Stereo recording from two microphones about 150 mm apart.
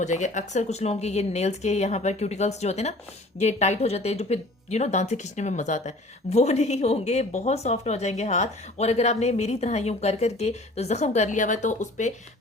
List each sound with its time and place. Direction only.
0.0 s a woman's voice: 55° left (ahead or behind)